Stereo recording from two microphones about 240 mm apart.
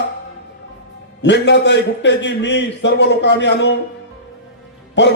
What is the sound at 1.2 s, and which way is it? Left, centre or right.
A man's voice, left.